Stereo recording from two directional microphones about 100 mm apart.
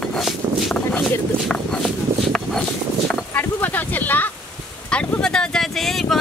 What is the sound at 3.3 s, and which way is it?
Speech, 15° left (ahead or behind).